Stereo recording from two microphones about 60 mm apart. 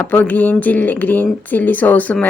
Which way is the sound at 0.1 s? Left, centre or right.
Left.